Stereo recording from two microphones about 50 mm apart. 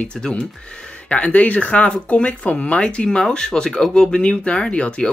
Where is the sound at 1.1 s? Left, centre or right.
Left.